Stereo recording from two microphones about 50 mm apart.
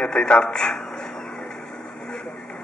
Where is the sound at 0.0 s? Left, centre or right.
Left.